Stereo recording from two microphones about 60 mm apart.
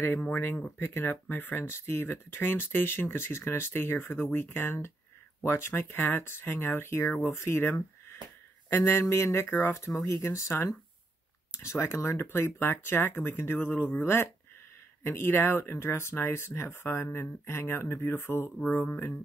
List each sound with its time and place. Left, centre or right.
0.3 s speech: left
9.5 s speech: left
9.8 s speech: left